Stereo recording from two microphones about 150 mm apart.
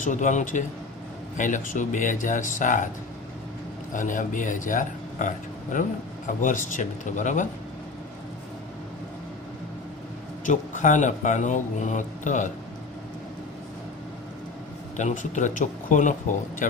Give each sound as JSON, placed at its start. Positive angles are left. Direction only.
{"t": 0.0, "sound": "speech", "side_deg": 55}
{"t": 3.9, "sound": "speech", "side_deg": 60}
{"t": 10.4, "sound": "speech", "side_deg": 55}
{"t": 14.9, "sound": "speech", "side_deg": 55}